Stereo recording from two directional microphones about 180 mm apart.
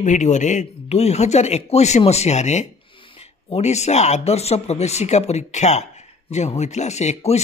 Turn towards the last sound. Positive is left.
turn(degrees=35)  # may be behind; listen again after turning